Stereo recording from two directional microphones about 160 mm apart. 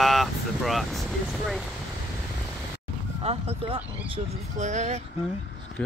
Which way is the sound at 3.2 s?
40° right (ahead or behind).